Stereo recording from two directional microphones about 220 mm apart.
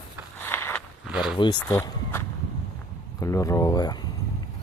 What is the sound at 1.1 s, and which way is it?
Speech, 5° right (ahead or behind).